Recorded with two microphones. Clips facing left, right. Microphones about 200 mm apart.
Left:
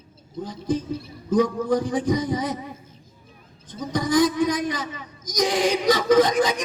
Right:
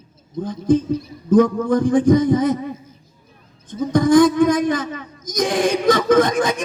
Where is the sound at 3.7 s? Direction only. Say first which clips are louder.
Right 9 dB; 50° right (ahead or behind).